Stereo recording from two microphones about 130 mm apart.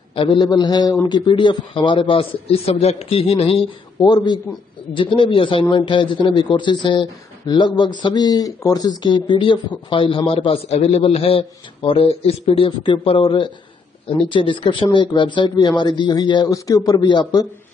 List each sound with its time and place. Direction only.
0.1 s a man's voice: 40° left (ahead or behind)